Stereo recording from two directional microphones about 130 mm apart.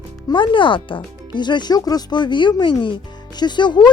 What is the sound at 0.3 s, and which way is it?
Speech, 40° left (ahead or behind).